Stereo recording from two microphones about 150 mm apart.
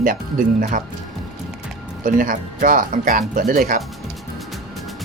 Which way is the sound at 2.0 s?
65° right (ahead or behind).